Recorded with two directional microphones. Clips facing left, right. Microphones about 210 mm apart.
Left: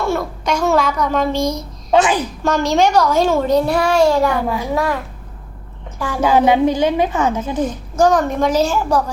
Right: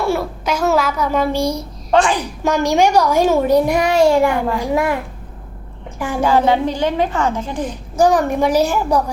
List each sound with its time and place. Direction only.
0.0 s a child's voice: 10° right (ahead or behind)
6.0 s a child's voice: 15° right (ahead or behind)
6.2 s a woman's voice: 15° left (ahead or behind)
7.6 s a child's voice: 10° right (ahead or behind)